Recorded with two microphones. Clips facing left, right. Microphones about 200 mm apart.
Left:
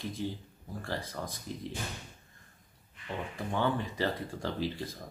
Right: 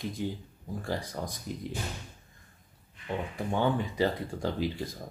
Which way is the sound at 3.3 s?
15° right (ahead or behind).